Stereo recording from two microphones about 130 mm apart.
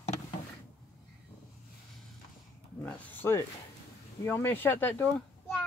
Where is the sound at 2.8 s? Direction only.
15° left (ahead or behind).